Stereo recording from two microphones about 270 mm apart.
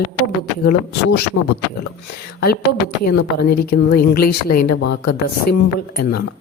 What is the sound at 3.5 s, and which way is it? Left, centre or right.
Speech, left.